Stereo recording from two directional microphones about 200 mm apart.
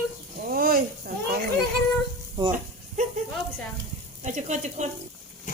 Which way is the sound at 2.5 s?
40° right (ahead or behind).